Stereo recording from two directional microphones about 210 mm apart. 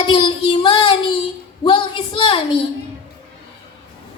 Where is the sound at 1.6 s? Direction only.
20° left (ahead or behind).